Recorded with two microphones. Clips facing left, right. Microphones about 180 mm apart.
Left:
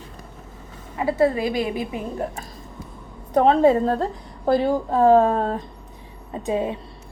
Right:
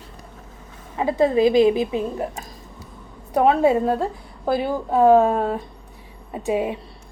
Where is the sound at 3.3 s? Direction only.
10° right (ahead or behind).